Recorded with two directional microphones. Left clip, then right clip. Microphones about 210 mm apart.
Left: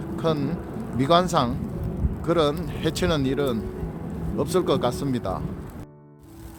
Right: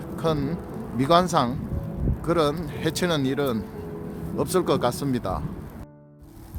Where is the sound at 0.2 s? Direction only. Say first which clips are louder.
Even; 15° right (ahead or behind).